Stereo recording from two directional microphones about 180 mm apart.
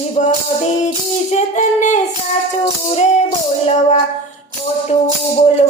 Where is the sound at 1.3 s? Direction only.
40° left (ahead or behind).